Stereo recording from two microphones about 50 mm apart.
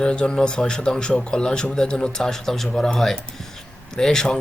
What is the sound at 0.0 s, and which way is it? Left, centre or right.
Speech, centre.